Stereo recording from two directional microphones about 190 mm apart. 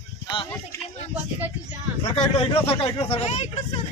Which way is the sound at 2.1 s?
30° left (ahead or behind).